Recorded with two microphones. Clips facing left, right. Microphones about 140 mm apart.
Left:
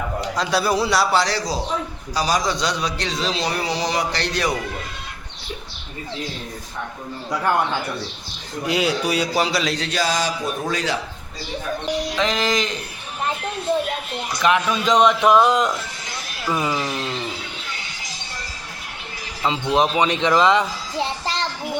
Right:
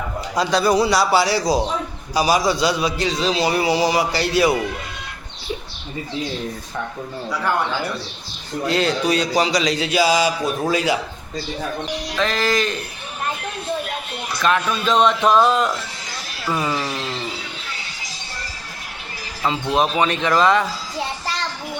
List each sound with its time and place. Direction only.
0.5 s a man's voice: 5° left (ahead or behind)
8.6 s a man's voice: 10° left (ahead or behind); by 11.0 s 10° right (ahead or behind)
12.1 s a man's voice: 15° left (ahead or behind)
14.4 s a man's voice: 15° left (ahead or behind)
16.8 s speech: centre (ahead or behind)
19.7 s a man's voice: 15° left (ahead or behind)